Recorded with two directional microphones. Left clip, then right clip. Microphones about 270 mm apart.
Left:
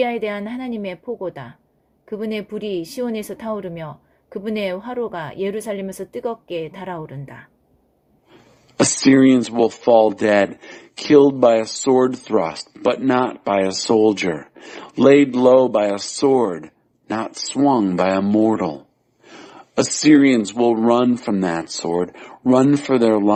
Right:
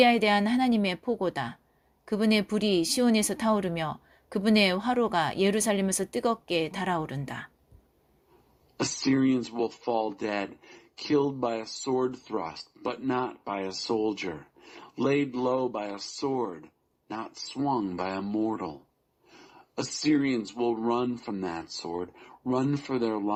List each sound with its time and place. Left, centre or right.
0.0 s speech: right
8.8 s speech: left